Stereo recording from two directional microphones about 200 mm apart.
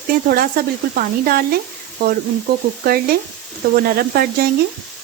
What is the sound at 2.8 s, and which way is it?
Sizzle, 50° right (ahead or behind).